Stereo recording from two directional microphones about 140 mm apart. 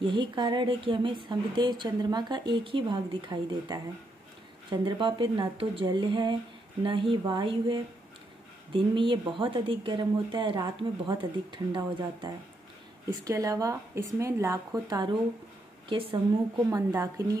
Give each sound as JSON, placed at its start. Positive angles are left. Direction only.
{"t": 0.0, "sound": "a woman's voice", "side_deg": -35}
{"t": 16.7, "sound": "speech", "side_deg": -25}